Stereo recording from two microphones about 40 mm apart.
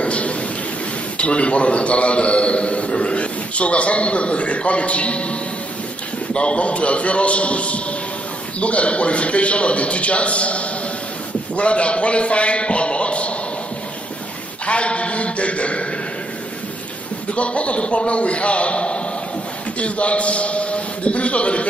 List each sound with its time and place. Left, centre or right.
0.0 s a sound: left
1.1 s a man's voice: left
14.7 s a man's voice: left
17.3 s a man's voice: left